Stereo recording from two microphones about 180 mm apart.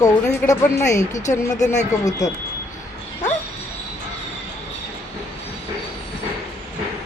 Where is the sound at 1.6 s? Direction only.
40° left (ahead or behind).